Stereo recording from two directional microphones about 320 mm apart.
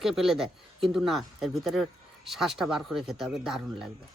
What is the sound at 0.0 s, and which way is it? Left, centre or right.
Speech, centre.